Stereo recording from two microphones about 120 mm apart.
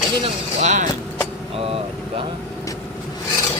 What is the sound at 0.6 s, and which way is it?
Speech, 80° right.